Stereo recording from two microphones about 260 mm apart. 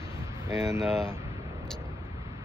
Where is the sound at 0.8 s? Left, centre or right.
Centre.